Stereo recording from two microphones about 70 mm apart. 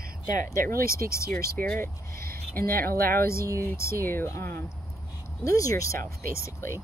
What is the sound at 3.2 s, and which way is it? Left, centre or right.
Speech, left.